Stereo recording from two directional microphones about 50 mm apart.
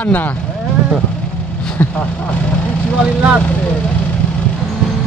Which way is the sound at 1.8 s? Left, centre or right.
Left.